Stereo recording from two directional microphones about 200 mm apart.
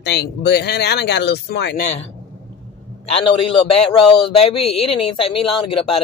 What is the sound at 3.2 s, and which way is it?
A man's voice, 30° left (ahead or behind).